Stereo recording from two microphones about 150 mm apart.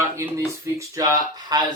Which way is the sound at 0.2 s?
20° right (ahead or behind).